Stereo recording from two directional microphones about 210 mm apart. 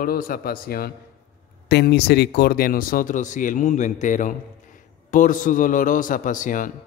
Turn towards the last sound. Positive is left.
turn(degrees=40)  # may be behind; listen again after turning